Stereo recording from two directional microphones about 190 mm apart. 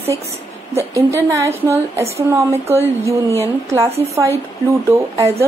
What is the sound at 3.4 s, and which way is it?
Speech, 15° right (ahead or behind).